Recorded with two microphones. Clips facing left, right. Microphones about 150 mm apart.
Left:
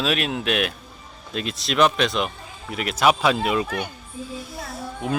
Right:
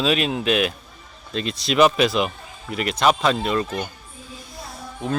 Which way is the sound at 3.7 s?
65° left (ahead or behind).